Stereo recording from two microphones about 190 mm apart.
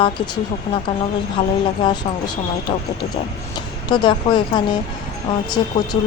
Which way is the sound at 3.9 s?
25° left (ahead or behind).